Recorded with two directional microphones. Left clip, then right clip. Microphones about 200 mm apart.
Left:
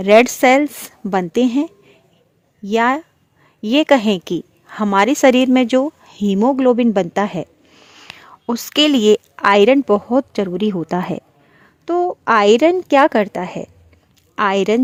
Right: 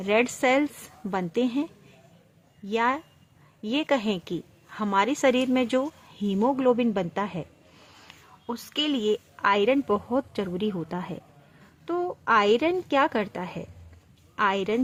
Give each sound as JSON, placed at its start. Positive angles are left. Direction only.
{"t": 0.0, "sound": "a woman's voice", "side_deg": 45}